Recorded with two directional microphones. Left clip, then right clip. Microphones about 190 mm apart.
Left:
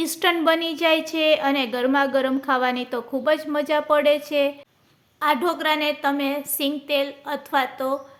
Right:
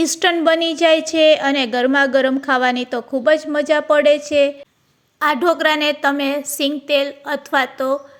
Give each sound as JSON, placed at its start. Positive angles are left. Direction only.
{"t": 0.0, "sound": "a woman's voice", "side_deg": -20}